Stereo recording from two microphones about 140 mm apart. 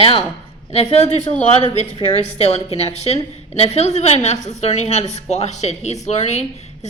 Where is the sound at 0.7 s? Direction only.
50° left (ahead or behind).